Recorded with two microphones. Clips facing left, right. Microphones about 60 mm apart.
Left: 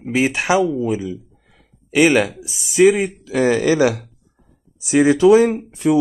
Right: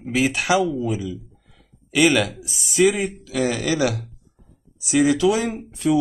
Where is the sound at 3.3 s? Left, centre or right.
Left.